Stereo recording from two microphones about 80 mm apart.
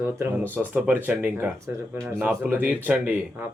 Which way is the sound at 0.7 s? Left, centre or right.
Right.